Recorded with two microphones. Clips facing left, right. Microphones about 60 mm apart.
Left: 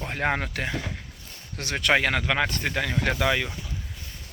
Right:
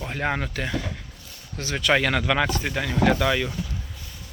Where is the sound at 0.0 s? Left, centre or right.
Left.